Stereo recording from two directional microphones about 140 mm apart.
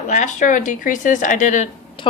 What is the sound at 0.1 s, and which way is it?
Speech, 60° left (ahead or behind).